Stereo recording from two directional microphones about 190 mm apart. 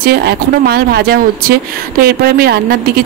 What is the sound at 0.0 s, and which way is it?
Speech, 55° right (ahead or behind).